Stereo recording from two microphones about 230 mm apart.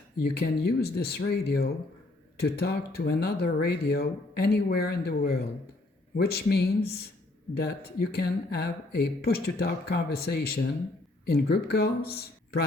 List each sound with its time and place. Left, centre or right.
0.2 s speech: left